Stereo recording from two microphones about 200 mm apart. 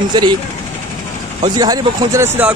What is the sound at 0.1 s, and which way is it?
Speech, 20° right (ahead or behind).